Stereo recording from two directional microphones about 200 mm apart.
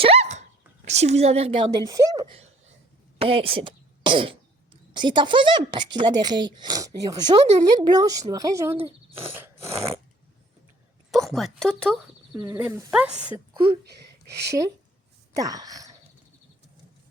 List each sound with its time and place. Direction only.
0.0 s dog: 30° right (ahead or behind)
0.9 s a woman's voice: 35° right (ahead or behind); by 8.7 s 15° right (ahead or behind)
8.7 s speech: 30° right (ahead or behind)
9.1 s a sound: 10° right (ahead or behind)
11.1 s speech: centre (ahead or behind)
12.3 s speech: 15° right (ahead or behind)
15.4 s wail: 20° right (ahead or behind)